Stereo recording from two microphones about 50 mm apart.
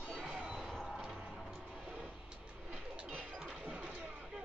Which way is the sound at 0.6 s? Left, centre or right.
Centre.